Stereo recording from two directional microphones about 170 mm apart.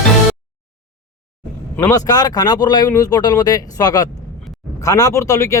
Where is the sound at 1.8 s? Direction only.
20° left (ahead or behind).